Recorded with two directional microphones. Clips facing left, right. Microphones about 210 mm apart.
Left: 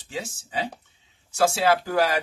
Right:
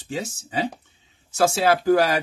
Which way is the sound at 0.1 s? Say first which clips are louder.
Right 4 dB; 45° right (ahead or behind).